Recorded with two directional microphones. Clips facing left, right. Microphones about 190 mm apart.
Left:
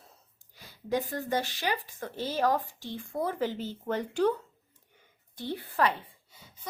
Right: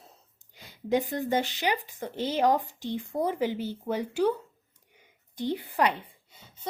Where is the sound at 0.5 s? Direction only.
20° right (ahead or behind).